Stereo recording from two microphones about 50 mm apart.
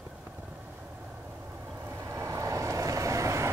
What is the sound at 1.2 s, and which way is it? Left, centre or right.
Vehicle, right.